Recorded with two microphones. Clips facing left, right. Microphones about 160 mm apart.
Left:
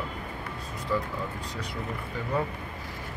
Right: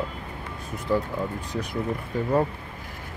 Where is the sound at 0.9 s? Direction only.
45° right (ahead or behind).